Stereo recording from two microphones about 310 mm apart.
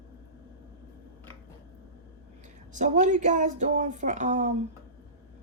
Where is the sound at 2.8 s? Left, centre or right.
Right.